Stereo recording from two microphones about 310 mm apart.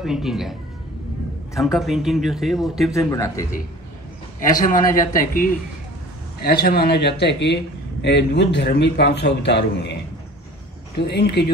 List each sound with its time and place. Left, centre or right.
0.0 s a man's voice: centre
2.9 s speech: centre
4.4 s speech: left
11.0 s speech: left